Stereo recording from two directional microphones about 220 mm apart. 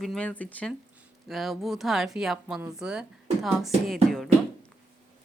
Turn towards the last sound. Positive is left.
turn(degrees=0)  # may be behind; listen again after turning